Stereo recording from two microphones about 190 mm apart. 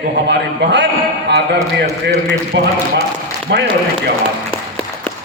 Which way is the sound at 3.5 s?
65° right (ahead or behind).